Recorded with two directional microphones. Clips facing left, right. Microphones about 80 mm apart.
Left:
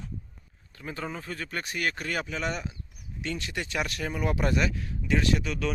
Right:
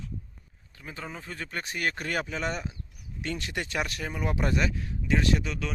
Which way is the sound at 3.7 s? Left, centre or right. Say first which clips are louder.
Left 3 dB; right.